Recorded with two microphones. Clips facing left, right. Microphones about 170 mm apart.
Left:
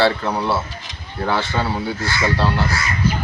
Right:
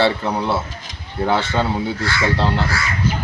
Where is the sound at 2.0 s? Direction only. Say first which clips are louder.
Right 1 dB; 20° left (ahead or behind).